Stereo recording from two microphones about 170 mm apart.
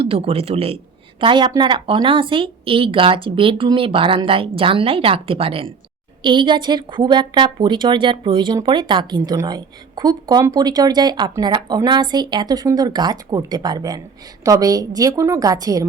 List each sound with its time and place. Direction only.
0.0 s a woman's voice: 35° right (ahead or behind)